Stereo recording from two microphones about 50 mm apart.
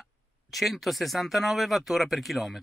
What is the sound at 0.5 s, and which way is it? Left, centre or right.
Speech, centre.